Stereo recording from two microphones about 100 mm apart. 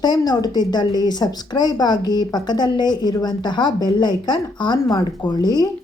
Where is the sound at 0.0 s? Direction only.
45° left (ahead or behind).